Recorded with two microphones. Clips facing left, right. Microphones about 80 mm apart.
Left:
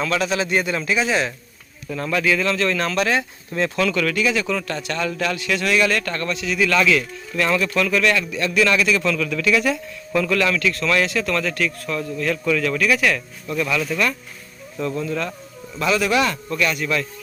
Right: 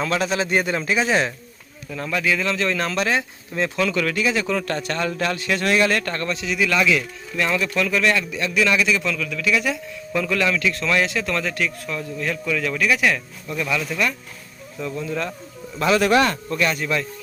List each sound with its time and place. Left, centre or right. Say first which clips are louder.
0.0 s speech: left 1 dB; right
2.0 s a man's voice: left 2 dB; centre; by 4.6 s right
4.6 s a man's voice: right 1 dB; right; by 15.2 s centre
15.8 s speech: right 2 dB; right